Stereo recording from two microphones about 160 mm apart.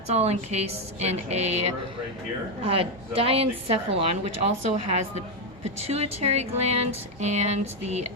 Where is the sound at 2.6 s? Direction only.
35° right (ahead or behind).